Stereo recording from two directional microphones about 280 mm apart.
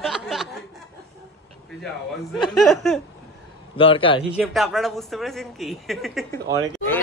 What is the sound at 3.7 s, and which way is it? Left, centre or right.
Speech, centre.